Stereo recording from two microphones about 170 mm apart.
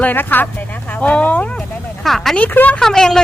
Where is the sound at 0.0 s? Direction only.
10° left (ahead or behind).